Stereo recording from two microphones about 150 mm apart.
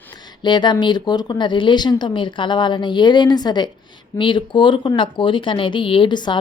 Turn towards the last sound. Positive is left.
turn(degrees=30)  # may be behind; listen again after turning